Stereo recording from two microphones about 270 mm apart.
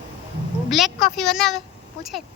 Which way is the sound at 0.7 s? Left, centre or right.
Centre.